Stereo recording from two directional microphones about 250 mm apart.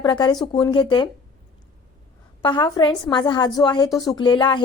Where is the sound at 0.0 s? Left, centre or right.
Centre.